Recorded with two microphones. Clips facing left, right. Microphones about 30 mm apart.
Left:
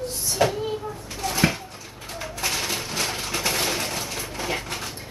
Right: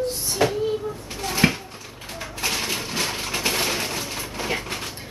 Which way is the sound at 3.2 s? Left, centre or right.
Centre.